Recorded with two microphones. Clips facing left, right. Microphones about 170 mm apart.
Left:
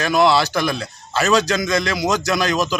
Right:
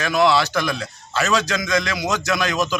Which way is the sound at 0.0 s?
35° left (ahead or behind).